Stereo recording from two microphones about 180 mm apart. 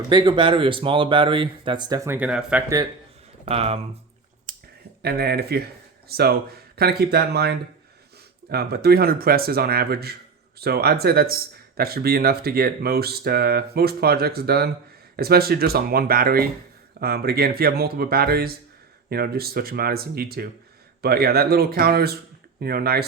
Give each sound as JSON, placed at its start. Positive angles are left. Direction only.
{"t": 0.1, "sound": "speech", "side_deg": -25}
{"t": 2.0, "sound": "speech", "side_deg": -10}
{"t": 3.4, "sound": "speech", "side_deg": -35}
{"t": 5.0, "sound": "speech", "side_deg": -60}